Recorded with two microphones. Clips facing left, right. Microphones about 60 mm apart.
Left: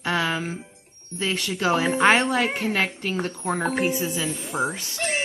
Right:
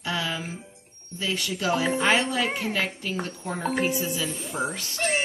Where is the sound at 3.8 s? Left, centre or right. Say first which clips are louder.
Left 2 dB; left.